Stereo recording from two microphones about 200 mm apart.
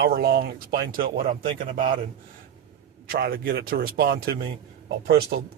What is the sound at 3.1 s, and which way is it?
Speech, 50° right (ahead or behind).